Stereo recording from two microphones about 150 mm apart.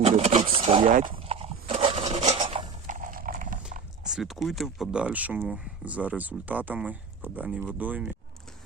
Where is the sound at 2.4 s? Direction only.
35° right (ahead or behind).